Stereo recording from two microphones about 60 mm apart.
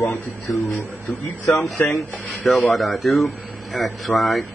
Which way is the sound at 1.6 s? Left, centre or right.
Centre.